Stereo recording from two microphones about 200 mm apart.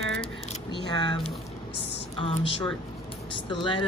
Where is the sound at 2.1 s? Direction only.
25° left (ahead or behind).